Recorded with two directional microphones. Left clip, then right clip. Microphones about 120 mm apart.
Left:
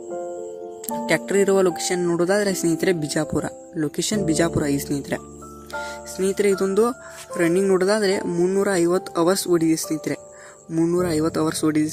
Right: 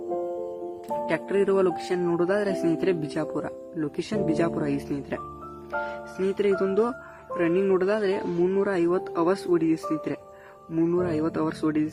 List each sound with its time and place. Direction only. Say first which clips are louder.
1.0 s speech: left 5 dB; 50° left (ahead or behind)
10.7 s speech: left 3 dB; 25° left (ahead or behind)
10.9 s speech: left 4 dB; 40° left (ahead or behind)